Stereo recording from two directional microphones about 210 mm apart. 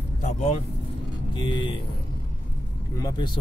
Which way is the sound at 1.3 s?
25° left (ahead or behind).